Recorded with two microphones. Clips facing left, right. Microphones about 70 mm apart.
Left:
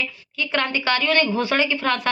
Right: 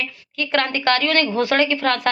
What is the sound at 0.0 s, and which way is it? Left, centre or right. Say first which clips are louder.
A woman's voice: right 1 dB; right.